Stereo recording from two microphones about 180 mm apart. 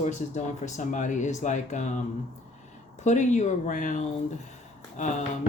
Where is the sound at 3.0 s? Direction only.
40° left (ahead or behind).